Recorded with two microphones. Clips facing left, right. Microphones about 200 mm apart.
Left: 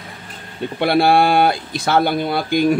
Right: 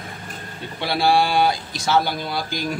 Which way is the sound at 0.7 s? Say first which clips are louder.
Left 5 dB; 55° left (ahead or behind).